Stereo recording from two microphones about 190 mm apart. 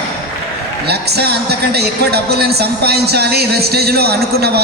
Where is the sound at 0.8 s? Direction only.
60° right (ahead or behind).